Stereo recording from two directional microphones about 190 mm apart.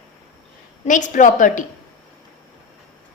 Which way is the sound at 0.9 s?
40° left (ahead or behind).